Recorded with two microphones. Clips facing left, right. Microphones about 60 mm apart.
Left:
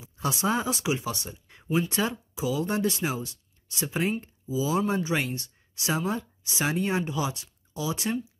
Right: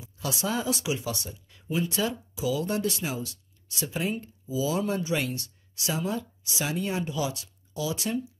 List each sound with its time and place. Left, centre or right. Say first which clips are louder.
0.0 s speech: left 3 dB; left